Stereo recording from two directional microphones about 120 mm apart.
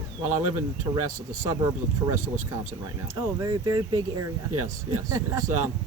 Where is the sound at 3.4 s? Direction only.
35° right (ahead or behind).